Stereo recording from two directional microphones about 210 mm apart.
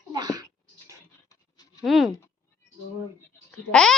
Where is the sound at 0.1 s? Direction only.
20° right (ahead or behind).